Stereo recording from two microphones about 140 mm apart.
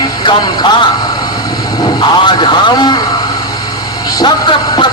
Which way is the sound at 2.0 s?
35° left (ahead or behind).